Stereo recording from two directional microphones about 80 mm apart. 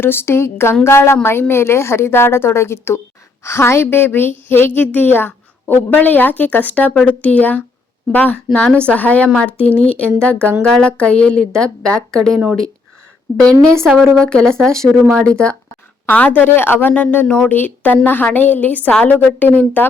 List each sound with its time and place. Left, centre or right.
0.0 s a woman's voice: left; by 12.3 s centre
13.8 s a woman's voice: centre
17.5 s a woman's voice: left